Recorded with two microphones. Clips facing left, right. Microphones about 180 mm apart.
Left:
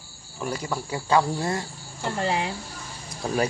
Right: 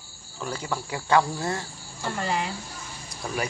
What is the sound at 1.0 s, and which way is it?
Speech, 20° left (ahead or behind).